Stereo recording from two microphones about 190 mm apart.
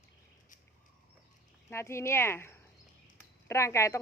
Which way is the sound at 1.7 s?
15° left (ahead or behind).